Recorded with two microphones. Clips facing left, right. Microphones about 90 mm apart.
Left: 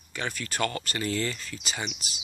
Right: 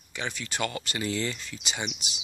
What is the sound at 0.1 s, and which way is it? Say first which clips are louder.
Speech: left 1 dB; 15° right (ahead or behind).